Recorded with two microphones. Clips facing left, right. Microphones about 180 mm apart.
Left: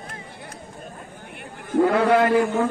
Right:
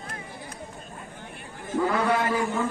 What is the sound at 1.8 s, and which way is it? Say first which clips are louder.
Speech: left 7 dB; 60° left (ahead or behind).